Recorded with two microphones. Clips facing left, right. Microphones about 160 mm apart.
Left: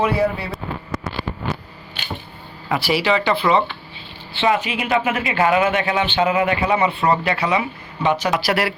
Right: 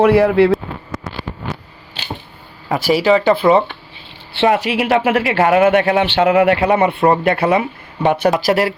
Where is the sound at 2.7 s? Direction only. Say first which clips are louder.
Right 6 dB; 45° right (ahead or behind).